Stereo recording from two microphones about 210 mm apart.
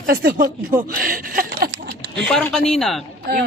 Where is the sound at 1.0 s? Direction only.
45° right (ahead or behind).